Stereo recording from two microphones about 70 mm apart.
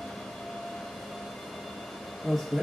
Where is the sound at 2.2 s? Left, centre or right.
Centre.